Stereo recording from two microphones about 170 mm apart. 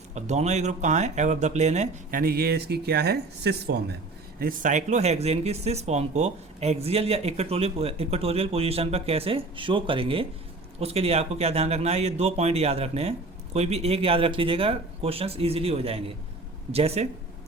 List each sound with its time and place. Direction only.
0.1 s speech: 40° right (ahead or behind); by 3.9 s 80° right
4.4 s speech: 50° right (ahead or behind); by 17.1 s 35° right (ahead or behind)